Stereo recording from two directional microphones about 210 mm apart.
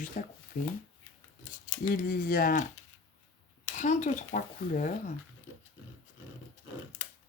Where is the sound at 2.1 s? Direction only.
40° left (ahead or behind).